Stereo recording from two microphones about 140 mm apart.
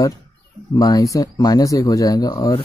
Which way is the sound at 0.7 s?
25° left (ahead or behind).